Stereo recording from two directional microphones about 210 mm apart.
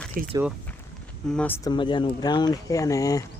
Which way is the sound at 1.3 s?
10° left (ahead or behind).